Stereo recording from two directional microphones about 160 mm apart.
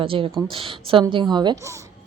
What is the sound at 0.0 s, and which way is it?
A woman's voice, 35° right (ahead or behind).